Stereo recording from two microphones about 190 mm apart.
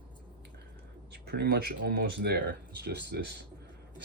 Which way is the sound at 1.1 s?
55° right (ahead or behind).